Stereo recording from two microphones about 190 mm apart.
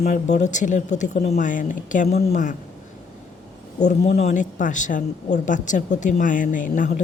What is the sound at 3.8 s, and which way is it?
Speech, 35° left (ahead or behind).